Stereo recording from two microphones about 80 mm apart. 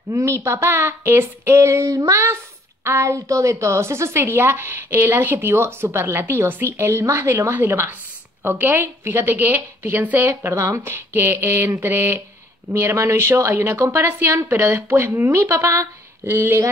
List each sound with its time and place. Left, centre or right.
0.1 s a woman's voice: right